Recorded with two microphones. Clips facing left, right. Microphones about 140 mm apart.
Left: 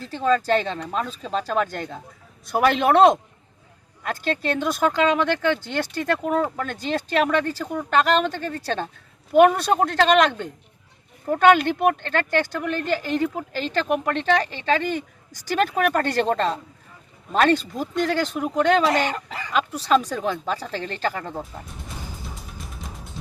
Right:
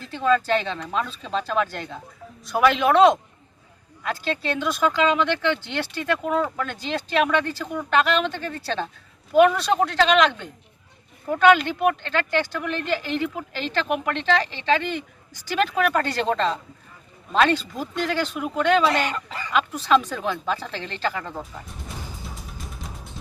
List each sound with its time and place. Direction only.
0.1 s speech: 40° left (ahead or behind)
22.3 s music: centre (ahead or behind)